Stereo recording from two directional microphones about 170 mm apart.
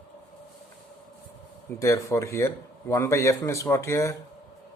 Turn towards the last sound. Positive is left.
turn(degrees=15)  # may be behind; listen again after turning